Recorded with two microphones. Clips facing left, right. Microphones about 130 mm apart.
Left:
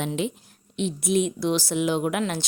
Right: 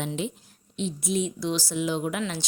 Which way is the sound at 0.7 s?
65° left (ahead or behind).